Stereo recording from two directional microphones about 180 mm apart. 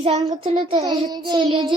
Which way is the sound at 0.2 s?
25° right (ahead or behind).